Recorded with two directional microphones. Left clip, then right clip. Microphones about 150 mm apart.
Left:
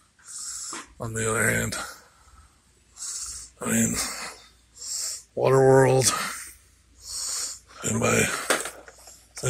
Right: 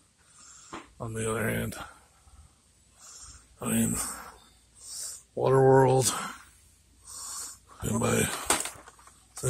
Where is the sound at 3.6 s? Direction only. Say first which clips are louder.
Left 4 dB; centre (ahead or behind).